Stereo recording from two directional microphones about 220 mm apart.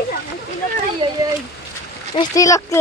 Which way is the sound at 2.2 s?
15° left (ahead or behind).